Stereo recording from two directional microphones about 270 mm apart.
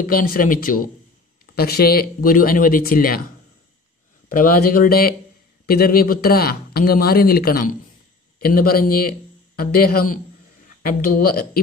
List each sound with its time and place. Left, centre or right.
0.0 s speech: left
4.3 s speech: left